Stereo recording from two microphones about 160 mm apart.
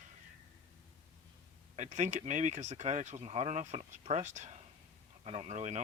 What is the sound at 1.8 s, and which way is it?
Speech, 50° right (ahead or behind).